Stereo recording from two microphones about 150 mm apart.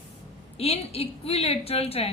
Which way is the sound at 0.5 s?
45° left (ahead or behind).